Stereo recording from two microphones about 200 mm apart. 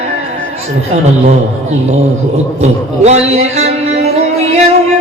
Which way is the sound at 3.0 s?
35° right (ahead or behind).